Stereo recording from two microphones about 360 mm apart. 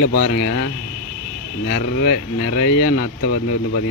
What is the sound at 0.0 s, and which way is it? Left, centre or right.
Speech, left.